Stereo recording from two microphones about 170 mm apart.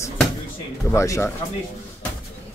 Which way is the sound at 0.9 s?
15° left (ahead or behind).